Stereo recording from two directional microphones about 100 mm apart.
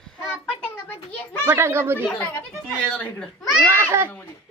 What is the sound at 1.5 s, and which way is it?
Speech, 25° right (ahead or behind).